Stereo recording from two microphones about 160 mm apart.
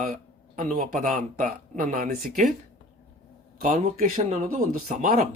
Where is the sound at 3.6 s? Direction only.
50° right (ahead or behind).